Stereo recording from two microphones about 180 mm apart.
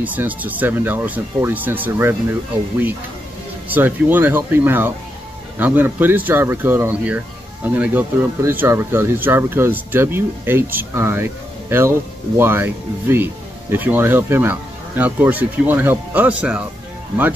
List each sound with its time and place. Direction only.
0.0 s speech: 10° right (ahead or behind)
3.7 s speech: 10° right (ahead or behind)